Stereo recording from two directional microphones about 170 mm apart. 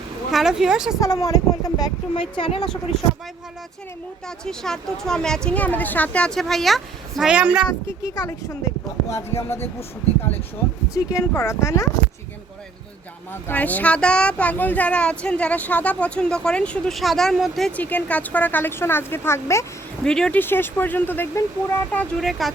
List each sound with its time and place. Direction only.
0.3 s a woman's voice: 5° right (ahead or behind)
0.9 s a woman's voice: 20° left (ahead or behind); by 3.0 s 35° left (ahead or behind)
4.3 s a woman's voice: 5° left (ahead or behind)
7.7 s speech: 20° left (ahead or behind)
10.9 s speech: 20° left (ahead or behind)
13.3 s speech: 10° left (ahead or behind)
20.1 s speech: 5° left (ahead or behind)
21.9 s a woman's voice: centre (ahead or behind)